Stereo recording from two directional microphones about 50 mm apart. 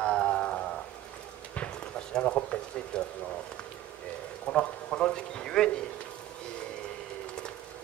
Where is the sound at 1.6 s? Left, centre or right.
Centre.